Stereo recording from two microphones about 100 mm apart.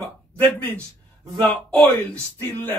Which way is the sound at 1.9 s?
20° left (ahead or behind).